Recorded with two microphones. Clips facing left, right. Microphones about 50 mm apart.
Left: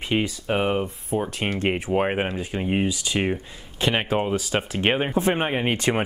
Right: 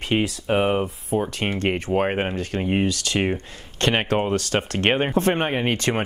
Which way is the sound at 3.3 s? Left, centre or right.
Centre.